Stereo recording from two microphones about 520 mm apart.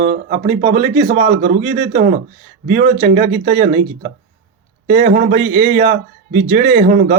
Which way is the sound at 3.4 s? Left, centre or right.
Centre.